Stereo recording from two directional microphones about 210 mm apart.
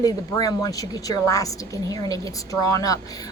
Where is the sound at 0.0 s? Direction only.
20° left (ahead or behind).